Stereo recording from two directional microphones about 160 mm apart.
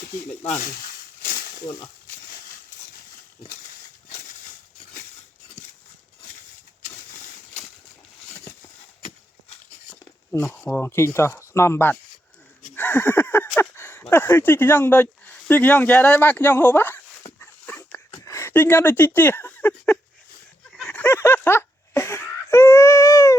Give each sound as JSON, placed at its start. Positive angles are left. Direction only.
{"t": 0.6, "sound": "speech", "side_deg": 55}
{"t": 9.9, "sound": "speech", "side_deg": 15}
{"t": 17.4, "sound": "dog", "side_deg": 10}
{"t": 20.7, "sound": "snicker", "side_deg": 5}